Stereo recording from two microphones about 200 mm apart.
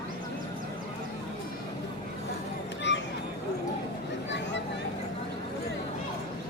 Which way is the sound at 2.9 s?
65° left (ahead or behind).